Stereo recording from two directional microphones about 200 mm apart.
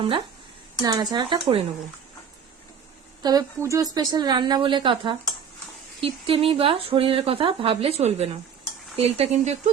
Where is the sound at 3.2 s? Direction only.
20° right (ahead or behind).